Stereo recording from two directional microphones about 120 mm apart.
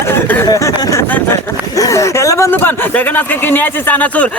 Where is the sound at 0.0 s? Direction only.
20° left (ahead or behind).